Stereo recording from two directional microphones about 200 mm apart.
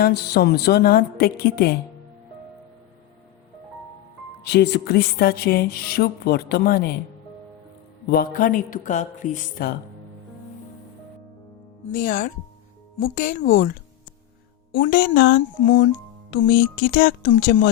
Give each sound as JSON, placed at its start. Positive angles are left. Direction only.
{"t": 0.0, "sound": "music", "side_deg": 55}
{"t": 4.4, "sound": "music", "side_deg": 55}
{"t": 8.1, "sound": "music", "side_deg": 45}
{"t": 11.9, "sound": "music", "side_deg": 40}
{"t": 14.8, "sound": "music", "side_deg": 50}
{"t": 17.3, "sound": "speech", "side_deg": 55}